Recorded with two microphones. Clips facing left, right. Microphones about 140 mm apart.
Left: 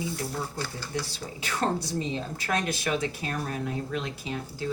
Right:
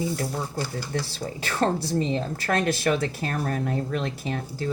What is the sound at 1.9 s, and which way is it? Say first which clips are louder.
Speech: right 5 dB; 50° right (ahead or behind).